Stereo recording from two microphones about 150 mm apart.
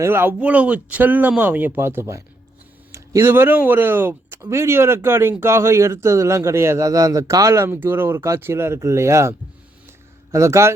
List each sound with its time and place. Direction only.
0.0 s speech: 15° right (ahead or behind)
10.3 s speech: 20° right (ahead or behind)